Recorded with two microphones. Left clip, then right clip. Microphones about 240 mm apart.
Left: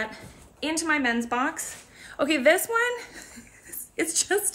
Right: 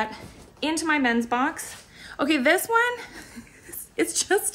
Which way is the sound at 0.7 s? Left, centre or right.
Centre.